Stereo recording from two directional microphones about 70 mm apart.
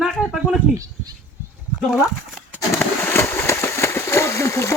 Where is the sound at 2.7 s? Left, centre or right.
Left.